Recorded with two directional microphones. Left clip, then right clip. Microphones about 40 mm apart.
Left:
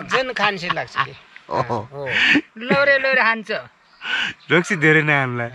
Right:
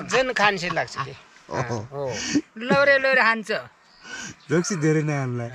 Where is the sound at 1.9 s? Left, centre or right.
Right.